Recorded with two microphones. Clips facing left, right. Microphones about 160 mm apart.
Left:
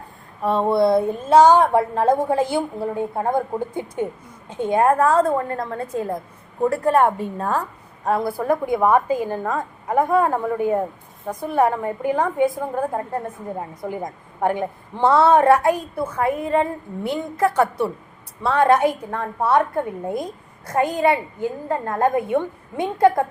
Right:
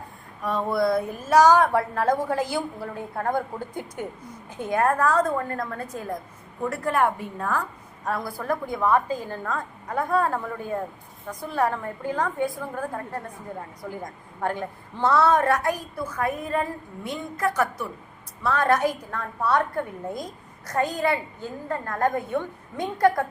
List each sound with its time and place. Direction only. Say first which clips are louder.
0.4 s a woman's voice: left 6 dB; 30° left (ahead or behind)
4.4 s a woman's voice: left 5 dB; 25° left (ahead or behind)
8.4 s a woman's voice: left 7 dB; 20° left (ahead or behind)